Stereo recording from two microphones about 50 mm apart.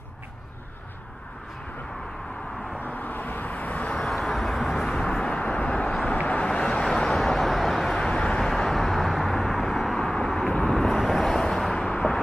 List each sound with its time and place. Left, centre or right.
2.8 s vehicle: left
4.1 s vehicle: centre
7.1 s vehicle: centre
8.0 s vehicle: centre